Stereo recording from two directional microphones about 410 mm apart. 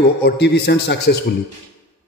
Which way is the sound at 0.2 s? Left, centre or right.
Left.